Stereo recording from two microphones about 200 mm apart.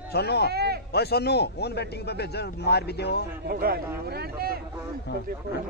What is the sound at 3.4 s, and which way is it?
Speech, 50° right (ahead or behind).